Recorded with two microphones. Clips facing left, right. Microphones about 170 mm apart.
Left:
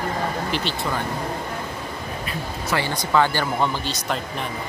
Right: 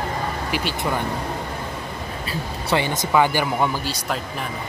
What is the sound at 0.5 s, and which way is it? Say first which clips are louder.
Speech: right 1 dB; 10° right (ahead or behind).